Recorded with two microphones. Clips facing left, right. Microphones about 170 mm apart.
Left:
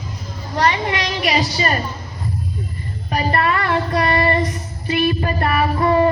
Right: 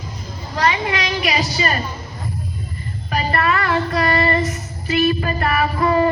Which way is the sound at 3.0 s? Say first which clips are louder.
Left 1 dB; 25° left (ahead or behind).